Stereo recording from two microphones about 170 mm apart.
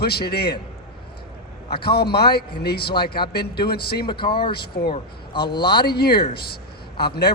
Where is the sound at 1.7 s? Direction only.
70° left (ahead or behind).